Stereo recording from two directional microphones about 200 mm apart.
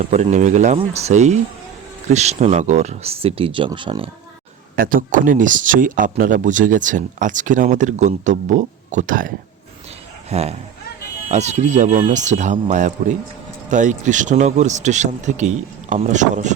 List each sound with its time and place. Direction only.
0.0 s speech: 35° right (ahead or behind)
4.8 s speech: 45° right (ahead or behind)